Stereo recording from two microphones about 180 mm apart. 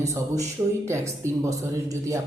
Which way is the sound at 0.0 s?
15° right (ahead or behind).